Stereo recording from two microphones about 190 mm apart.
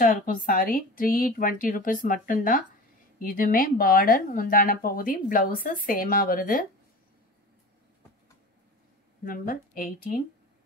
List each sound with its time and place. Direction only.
0.0 s speech: 45° left (ahead or behind)
9.2 s speech: 50° left (ahead or behind)